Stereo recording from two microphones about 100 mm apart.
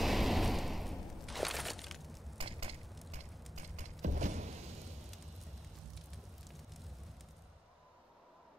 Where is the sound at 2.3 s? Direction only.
65° right (ahead or behind).